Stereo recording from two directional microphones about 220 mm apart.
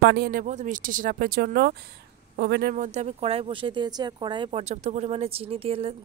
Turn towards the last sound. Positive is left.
turn(degrees=-25)  # may be behind; listen again after turning